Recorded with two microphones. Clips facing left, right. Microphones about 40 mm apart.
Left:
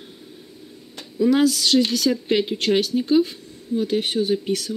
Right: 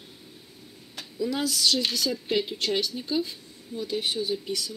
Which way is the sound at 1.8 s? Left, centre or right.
Centre.